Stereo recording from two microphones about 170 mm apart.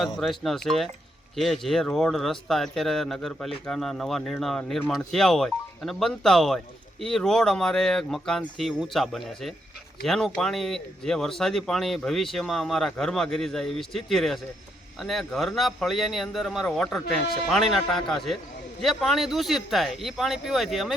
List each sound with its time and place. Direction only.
0.0 s speech: centre (ahead or behind)